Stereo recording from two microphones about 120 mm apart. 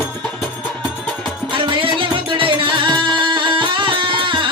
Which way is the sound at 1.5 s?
45° right (ahead or behind).